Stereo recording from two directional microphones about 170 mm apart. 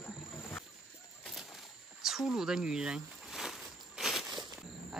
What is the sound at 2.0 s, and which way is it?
Snake, centre (ahead or behind).